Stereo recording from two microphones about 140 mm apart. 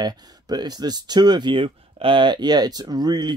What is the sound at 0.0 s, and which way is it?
Speech, 30° right (ahead or behind).